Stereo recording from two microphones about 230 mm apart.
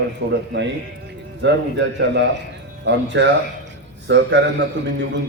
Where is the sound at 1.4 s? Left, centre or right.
Right.